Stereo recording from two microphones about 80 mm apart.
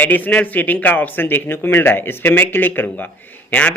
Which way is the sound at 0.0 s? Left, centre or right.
Left.